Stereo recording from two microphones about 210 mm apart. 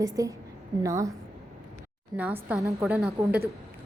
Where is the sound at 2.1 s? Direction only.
5° right (ahead or behind).